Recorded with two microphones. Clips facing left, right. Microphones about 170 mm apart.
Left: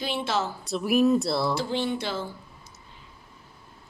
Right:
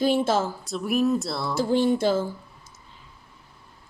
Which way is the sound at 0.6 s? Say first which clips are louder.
Left 2 dB; centre (ahead or behind).